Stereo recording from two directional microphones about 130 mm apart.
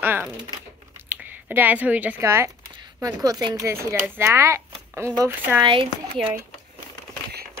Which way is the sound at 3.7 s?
15° right (ahead or behind).